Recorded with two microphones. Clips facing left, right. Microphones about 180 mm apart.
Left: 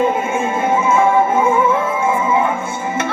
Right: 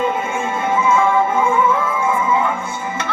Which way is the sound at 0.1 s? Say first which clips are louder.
Left 3 dB; 25° left (ahead or behind).